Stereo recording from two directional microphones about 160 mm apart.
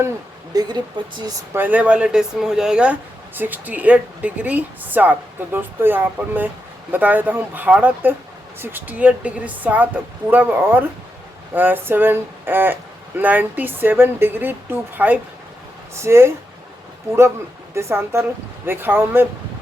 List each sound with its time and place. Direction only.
0.5 s speech: 25° right (ahead or behind)
1.5 s speech: 10° right (ahead or behind)